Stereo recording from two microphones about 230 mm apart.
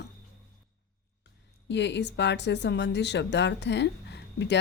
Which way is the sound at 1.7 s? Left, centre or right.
Left.